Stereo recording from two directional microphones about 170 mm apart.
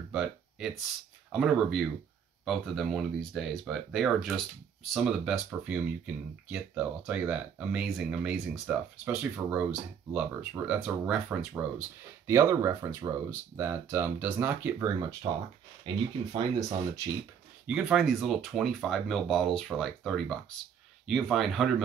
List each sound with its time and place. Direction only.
0.1 s a sound: 5° right (ahead or behind)
1.3 s speech: centre (ahead or behind)
12.3 s speech: 20° right (ahead or behind)
15.8 s speech: 25° right (ahead or behind)
17.6 s speech: 5° right (ahead or behind)